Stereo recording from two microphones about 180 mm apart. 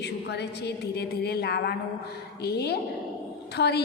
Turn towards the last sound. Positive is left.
turn(degrees=65)  # may be behind; listen again after turning